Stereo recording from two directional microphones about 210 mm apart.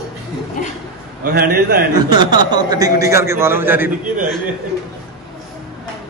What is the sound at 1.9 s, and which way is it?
A man's voice, 20° right (ahead or behind).